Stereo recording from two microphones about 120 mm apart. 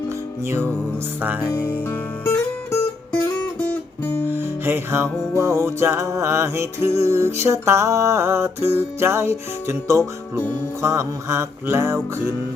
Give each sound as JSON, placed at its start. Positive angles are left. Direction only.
{"t": 0.4, "sound": "music", "side_deg": -20}
{"t": 3.1, "sound": "music", "side_deg": 10}
{"t": 4.3, "sound": "music", "side_deg": -20}